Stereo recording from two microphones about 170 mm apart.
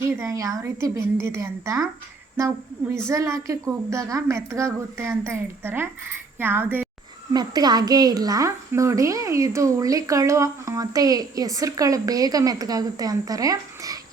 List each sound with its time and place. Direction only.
0.0 s a woman's voice: 15° right (ahead or behind)
3.1 s a woman's voice: 15° right (ahead or behind)
7.3 s a woman's voice: 25° right (ahead or behind)